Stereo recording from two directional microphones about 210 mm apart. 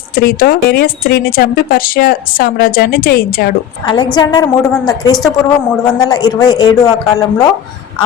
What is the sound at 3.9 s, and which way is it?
Speech, 20° left (ahead or behind).